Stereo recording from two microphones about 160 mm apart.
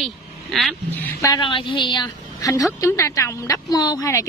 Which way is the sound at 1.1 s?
25° left (ahead or behind).